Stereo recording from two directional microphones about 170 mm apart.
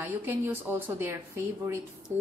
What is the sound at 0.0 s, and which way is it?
Speech, 10° right (ahead or behind).